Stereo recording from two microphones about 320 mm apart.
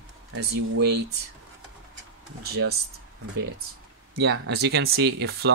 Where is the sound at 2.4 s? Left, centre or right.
Right.